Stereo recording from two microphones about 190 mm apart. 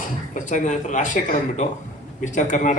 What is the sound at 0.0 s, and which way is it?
A man's voice, 40° left (ahead or behind).